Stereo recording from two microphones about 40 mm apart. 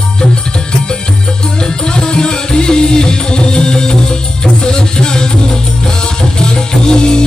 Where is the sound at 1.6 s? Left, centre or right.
Centre.